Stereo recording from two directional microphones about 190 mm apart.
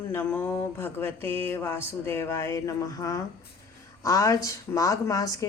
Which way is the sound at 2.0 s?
15° left (ahead or behind).